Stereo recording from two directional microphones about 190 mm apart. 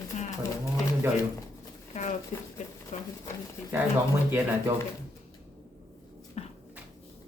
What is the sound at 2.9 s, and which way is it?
Speech, 35° left (ahead or behind).